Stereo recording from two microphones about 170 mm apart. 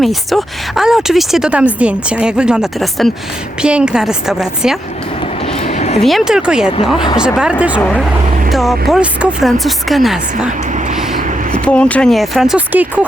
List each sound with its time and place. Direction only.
0.0 s speech: centre (ahead or behind)
5.6 s a sound: 40° left (ahead or behind)
6.0 s speech: centre (ahead or behind)
11.6 s speech: 5° left (ahead or behind); by 13.1 s 10° right (ahead or behind)